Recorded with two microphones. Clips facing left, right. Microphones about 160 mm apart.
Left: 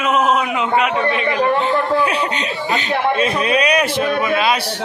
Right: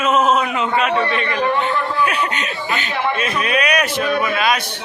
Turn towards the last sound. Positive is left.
turn(degrees=25)  # may be behind; listen again after turning